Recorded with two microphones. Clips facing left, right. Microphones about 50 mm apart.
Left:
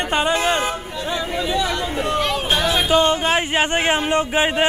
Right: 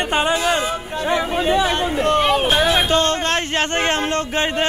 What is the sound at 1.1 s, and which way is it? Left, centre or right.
Speech, right.